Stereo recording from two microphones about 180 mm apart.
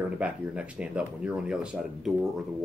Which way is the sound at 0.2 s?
5° right (ahead or behind).